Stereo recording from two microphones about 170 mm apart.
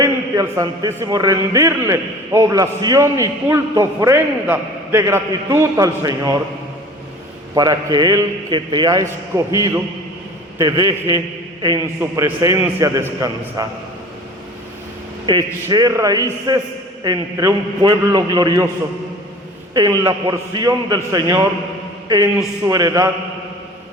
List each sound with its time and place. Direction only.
0.0 s a man's voice: 20° right (ahead or behind)
7.5 s a man's voice: 20° right (ahead or behind)
15.3 s a man's voice: 25° right (ahead or behind)
19.7 s a man's voice: 20° right (ahead or behind)
22.6 s a man's voice: 20° right (ahead or behind)